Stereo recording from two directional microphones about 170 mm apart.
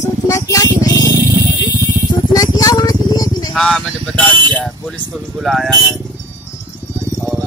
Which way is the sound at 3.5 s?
5° left (ahead or behind).